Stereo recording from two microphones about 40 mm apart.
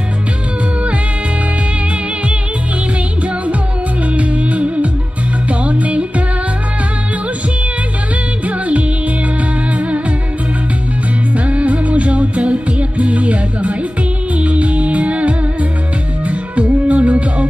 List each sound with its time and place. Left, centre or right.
4.1 s music: right
8.5 s music: right
11.3 s music: right